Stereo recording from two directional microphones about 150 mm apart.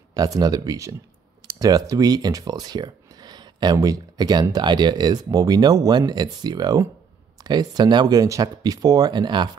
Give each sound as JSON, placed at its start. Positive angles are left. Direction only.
{"t": 0.1, "sound": "speech", "side_deg": -25}